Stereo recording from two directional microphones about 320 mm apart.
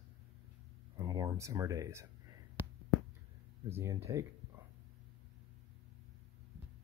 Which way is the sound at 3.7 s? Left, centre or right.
Centre.